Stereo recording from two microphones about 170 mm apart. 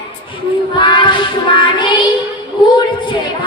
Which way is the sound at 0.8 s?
25° left (ahead or behind).